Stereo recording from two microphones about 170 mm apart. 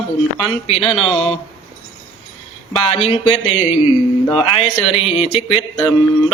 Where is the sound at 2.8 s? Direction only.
35° left (ahead or behind).